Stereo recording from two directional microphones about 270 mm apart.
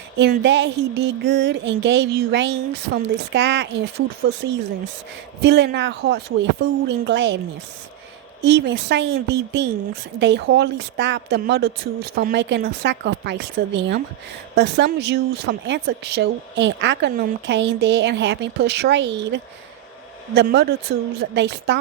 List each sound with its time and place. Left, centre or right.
0.2 s speech: right
8.4 s speech: right